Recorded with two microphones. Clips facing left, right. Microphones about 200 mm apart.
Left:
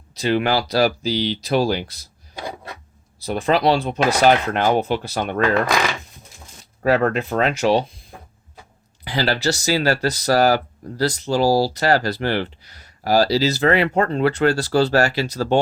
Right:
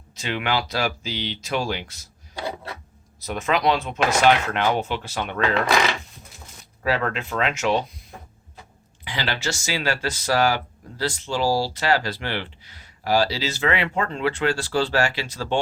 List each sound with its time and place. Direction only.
0.1 s speech: 35° left (ahead or behind)
3.2 s speech: 30° left (ahead or behind)
6.8 s speech: 45° left (ahead or behind)
9.0 s speech: 40° left (ahead or behind)